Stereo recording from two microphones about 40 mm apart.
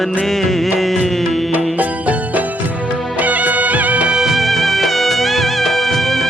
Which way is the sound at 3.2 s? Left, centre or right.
Right.